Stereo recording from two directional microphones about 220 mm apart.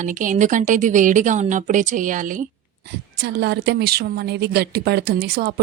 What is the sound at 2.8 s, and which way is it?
A woman's voice, 50° right (ahead or behind).